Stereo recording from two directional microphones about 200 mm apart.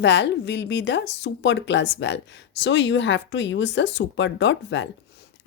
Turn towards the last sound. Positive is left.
turn(degrees=65)  # may be behind; listen again after turning